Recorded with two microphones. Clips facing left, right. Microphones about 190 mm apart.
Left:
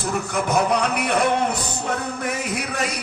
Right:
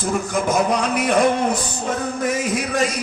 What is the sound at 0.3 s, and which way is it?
A man's voice, 65° left (ahead or behind).